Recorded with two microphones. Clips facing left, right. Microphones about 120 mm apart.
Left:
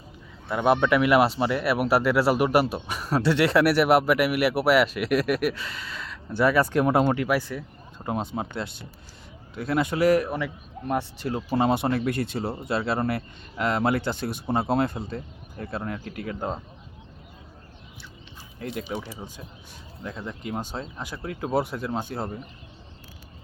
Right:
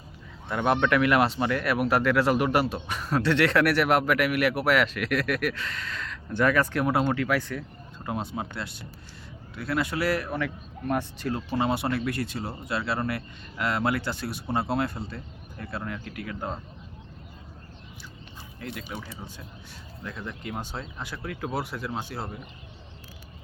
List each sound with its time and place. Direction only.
0.4 s speech: 10° left (ahead or behind)
8.0 s speech: 20° left (ahead or behind)
11.5 s speech: 25° left (ahead or behind)
18.8 s speech: 25° left (ahead or behind)